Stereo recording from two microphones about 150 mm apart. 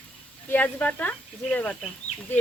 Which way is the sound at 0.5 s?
10° left (ahead or behind).